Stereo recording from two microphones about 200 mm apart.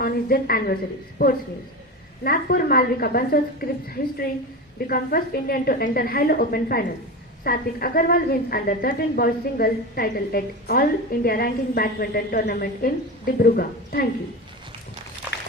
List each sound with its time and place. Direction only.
0.0 s a woman's voice: 50° left (ahead or behind)